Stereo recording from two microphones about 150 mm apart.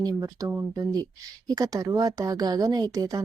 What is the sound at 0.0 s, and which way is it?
A woman's voice, 25° right (ahead or behind).